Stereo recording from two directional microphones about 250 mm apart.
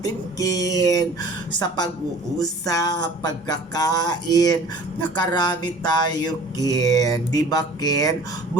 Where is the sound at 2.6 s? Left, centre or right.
Centre.